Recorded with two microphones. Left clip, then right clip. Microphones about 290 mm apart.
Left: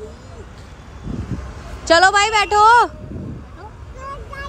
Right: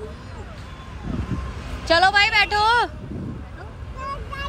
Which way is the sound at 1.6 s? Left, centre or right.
Left.